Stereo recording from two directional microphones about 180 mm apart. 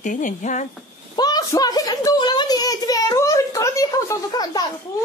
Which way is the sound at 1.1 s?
20° left (ahead or behind).